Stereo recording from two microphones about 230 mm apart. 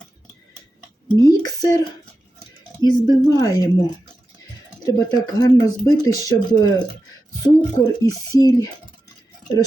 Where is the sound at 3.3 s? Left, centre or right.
Centre.